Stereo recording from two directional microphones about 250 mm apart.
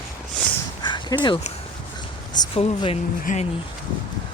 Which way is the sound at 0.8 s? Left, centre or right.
Centre.